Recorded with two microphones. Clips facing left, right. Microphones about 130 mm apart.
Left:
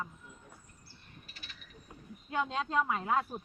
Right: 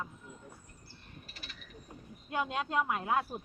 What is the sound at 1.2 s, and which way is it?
Mechanisms, 40° right (ahead or behind).